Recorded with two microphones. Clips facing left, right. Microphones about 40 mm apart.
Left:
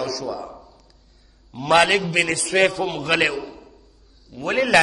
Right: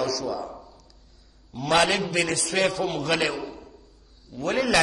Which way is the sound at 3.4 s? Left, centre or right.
Centre.